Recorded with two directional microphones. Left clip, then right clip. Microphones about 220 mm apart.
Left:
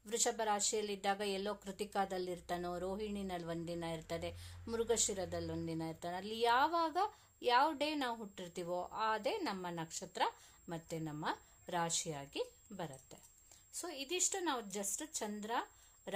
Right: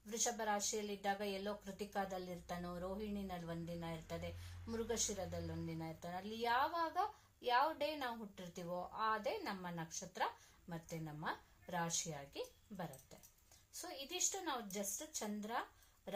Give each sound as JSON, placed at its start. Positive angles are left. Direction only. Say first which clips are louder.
{"t": 0.1, "sound": "speech", "louder": "left 4 dB", "side_deg": 50}